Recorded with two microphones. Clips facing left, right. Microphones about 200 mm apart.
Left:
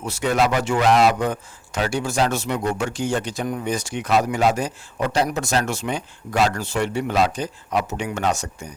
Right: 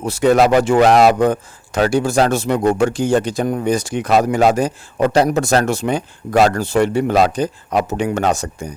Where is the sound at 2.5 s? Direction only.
50° right (ahead or behind).